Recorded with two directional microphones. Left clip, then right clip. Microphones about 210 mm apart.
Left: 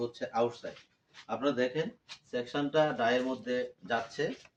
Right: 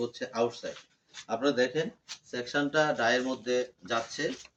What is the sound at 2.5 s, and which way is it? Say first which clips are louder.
Speech: right 2 dB; 5° left (ahead or behind).